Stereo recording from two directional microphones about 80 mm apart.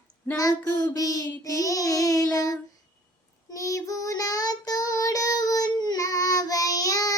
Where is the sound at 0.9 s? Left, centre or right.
Left.